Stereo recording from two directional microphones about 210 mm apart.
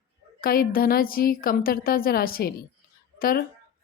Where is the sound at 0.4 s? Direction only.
45° left (ahead or behind).